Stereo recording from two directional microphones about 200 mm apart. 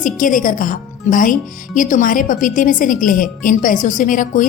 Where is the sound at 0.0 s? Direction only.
40° left (ahead or behind).